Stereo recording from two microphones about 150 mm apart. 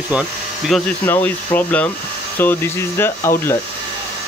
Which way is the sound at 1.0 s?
15° left (ahead or behind).